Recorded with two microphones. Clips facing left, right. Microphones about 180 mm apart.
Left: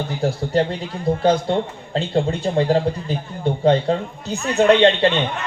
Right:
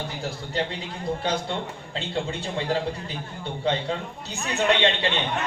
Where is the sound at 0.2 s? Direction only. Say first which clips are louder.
Left 11 dB; 45° left (ahead or behind).